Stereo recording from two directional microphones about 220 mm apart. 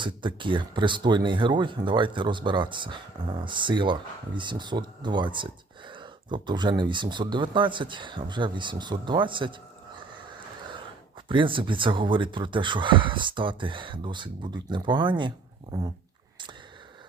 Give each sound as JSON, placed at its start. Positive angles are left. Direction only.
{"t": 0.0, "sound": "speech", "side_deg": -20}
{"t": 11.3, "sound": "speech", "side_deg": -25}